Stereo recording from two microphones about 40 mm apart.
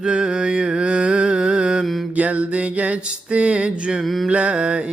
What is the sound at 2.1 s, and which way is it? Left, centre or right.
Mantra, right.